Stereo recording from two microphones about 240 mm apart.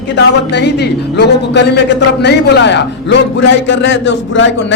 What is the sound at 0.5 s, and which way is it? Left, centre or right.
A man's voice, left.